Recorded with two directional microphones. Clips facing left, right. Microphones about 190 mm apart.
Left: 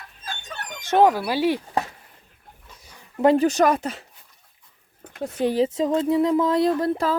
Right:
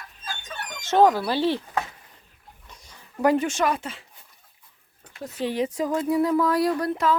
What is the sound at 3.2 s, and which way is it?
Speech, 25° left (ahead or behind).